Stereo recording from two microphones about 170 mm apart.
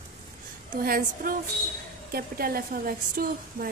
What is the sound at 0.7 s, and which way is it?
Speech, 60° right (ahead or behind).